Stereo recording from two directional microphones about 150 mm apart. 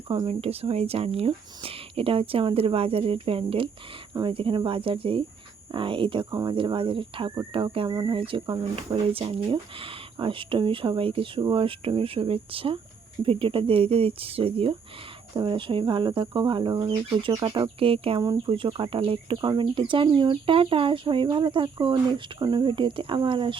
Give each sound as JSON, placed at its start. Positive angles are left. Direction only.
{"t": 0.1, "sound": "speech", "side_deg": -35}